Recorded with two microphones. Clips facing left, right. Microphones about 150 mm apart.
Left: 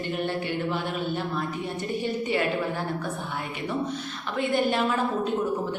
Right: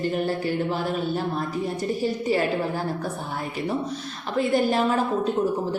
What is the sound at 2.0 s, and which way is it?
Speech, 35° right (ahead or behind).